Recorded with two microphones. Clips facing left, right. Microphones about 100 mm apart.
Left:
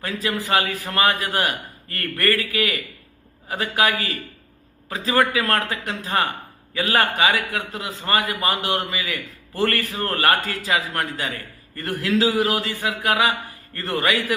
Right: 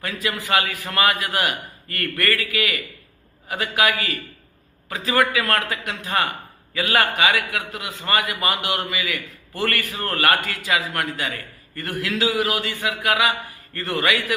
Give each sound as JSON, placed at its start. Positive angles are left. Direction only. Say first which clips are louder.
{"t": 0.0, "sound": "a man's voice", "louder": "left 2 dB", "side_deg": 30}